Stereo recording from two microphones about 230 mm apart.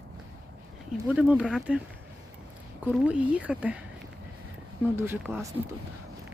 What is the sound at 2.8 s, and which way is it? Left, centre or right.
Speech, centre.